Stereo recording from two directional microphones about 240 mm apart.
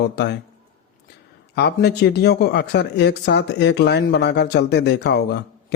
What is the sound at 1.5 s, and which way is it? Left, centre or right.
Speech, left.